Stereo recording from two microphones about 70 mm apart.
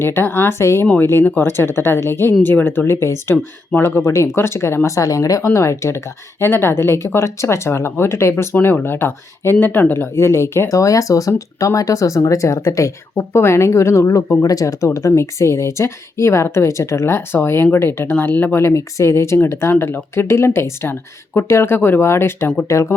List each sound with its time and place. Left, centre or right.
0.0 s speech: left
6.4 s speech: left
10.7 s speech: left
14.9 s speech: left
18.6 s speech: left